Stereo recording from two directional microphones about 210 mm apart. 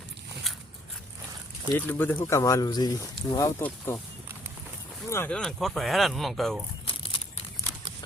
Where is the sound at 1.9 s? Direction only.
10° left (ahead or behind).